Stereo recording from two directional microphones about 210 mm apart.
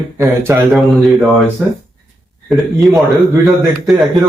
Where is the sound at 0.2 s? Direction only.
10° right (ahead or behind).